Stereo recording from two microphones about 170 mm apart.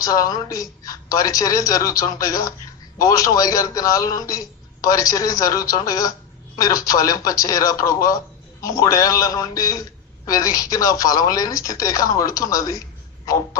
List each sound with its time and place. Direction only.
0.0 s a man's voice: 20° left (ahead or behind)